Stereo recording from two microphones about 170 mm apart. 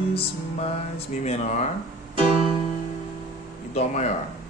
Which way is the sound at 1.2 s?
40° left (ahead or behind).